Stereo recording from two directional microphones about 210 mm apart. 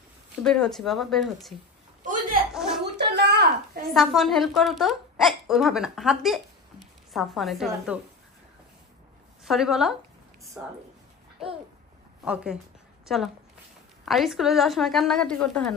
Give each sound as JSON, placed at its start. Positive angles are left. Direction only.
{"t": 0.4, "sound": "a woman's voice", "side_deg": 0}
{"t": 2.5, "sound": "a sound", "side_deg": 0}
{"t": 2.8, "sound": "a sound", "side_deg": -55}
{"t": 3.9, "sound": "a woman's voice", "side_deg": 0}
{"t": 9.4, "sound": "a woman's voice", "side_deg": 0}
{"t": 13.0, "sound": "a woman's voice", "side_deg": 0}